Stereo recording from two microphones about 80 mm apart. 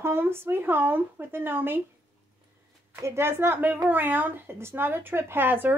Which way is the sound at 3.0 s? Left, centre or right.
Right.